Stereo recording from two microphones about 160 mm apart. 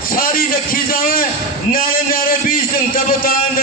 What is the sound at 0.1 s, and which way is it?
A man's voice, 65° left (ahead or behind).